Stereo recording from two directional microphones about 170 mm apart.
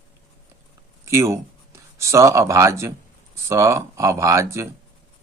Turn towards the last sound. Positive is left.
turn(degrees=-15)  # may be behind; listen again after turning